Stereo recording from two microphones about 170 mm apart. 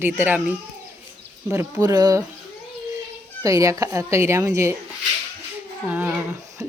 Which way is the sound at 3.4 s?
20° right (ahead or behind).